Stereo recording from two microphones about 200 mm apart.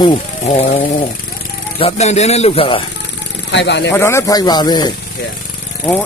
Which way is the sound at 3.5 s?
60° left (ahead or behind).